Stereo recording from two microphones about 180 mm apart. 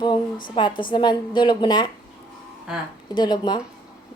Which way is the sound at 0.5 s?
30° left (ahead or behind).